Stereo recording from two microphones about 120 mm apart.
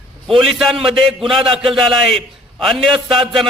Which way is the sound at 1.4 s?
45° right (ahead or behind).